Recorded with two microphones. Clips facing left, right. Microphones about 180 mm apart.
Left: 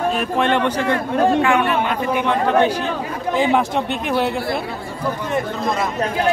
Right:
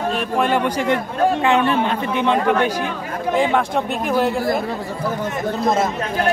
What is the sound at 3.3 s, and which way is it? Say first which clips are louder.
Speech: left 1 dB; centre (ahead or behind).